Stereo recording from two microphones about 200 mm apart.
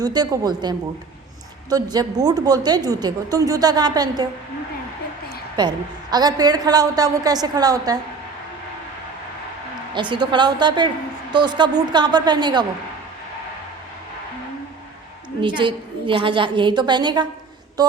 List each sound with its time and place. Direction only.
0.0 s a woman's voice: 20° right (ahead or behind)
5.5 s a woman's voice: 20° right (ahead or behind)
9.9 s a woman's voice: 25° right (ahead or behind)
15.4 s a woman's voice: 25° right (ahead or behind)
17.8 s a sound: 20° right (ahead or behind)